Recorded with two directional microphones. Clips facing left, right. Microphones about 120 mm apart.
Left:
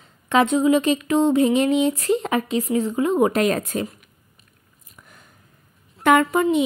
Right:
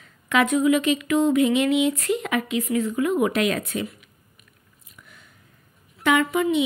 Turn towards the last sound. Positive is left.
turn(degrees=45)  # may be behind; listen again after turning